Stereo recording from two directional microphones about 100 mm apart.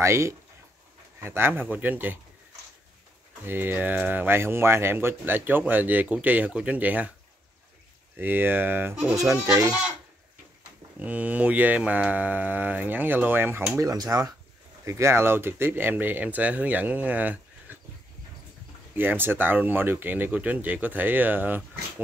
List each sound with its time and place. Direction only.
0.0 s speech: 30° right (ahead or behind)
3.4 s speech: 20° right (ahead or behind)
8.2 s speech: 20° right (ahead or behind)
9.1 s speech: 30° right (ahead or behind)
11.0 s speech: 15° right (ahead or behind)
13.8 s speech: 35° right (ahead or behind); by 17.7 s 15° right (ahead or behind)
18.9 s speech: 20° right (ahead or behind)